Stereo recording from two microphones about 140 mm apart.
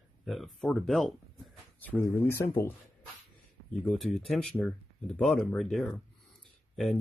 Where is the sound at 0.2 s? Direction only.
Centre (ahead or behind).